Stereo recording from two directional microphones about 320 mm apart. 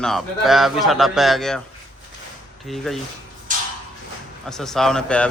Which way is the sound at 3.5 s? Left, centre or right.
Right.